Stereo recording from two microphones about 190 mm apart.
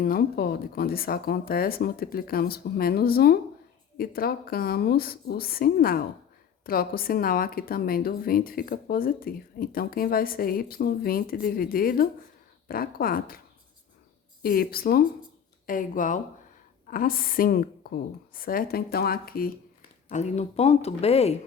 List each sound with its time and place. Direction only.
0.0 s a woman's voice: 50° left (ahead or behind)
14.4 s a woman's voice: 50° left (ahead or behind)
20.1 s speech: 40° left (ahead or behind)